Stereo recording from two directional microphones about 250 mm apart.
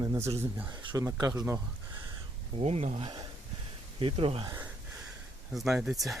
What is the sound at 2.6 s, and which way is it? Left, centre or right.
Speech, right.